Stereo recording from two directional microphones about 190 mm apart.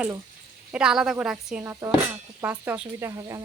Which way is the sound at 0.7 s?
5° right (ahead or behind).